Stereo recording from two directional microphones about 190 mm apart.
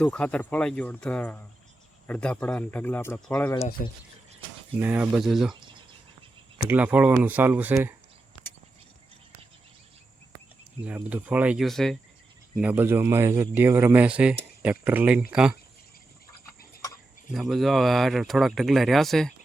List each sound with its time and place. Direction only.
0.0 s speech: 5° left (ahead or behind)
3.8 s speech: 45° left (ahead or behind)
4.8 s speech: 10° right (ahead or behind)
6.7 s speech: 10° right (ahead or behind)
10.8 s speech: 5° right (ahead or behind)
12.5 s speech: 10° right (ahead or behind)
17.5 s speech: centre (ahead or behind)